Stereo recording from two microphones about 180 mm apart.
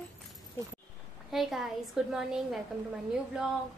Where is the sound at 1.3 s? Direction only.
Centre (ahead or behind).